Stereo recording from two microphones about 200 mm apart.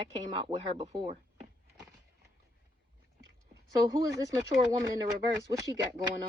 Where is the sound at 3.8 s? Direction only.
15° right (ahead or behind).